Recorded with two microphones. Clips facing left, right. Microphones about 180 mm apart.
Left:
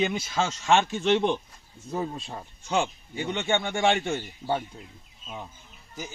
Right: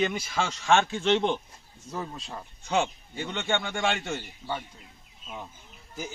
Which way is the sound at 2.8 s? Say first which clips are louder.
Left 1 dB; 15° left (ahead or behind).